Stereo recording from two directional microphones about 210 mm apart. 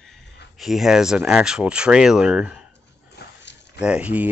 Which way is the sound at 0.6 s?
Centre (ahead or behind).